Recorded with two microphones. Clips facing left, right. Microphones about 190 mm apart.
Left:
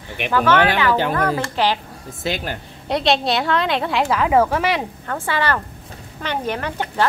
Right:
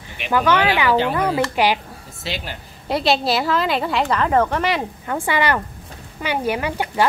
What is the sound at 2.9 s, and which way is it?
A woman's voice, 5° right (ahead or behind).